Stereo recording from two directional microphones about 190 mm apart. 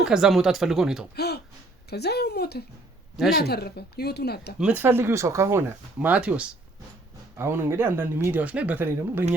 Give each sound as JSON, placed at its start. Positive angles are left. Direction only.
{"t": 0.0, "sound": "speech", "side_deg": -5}
{"t": 1.1, "sound": "speech", "side_deg": 60}
{"t": 4.6, "sound": "speech", "side_deg": -10}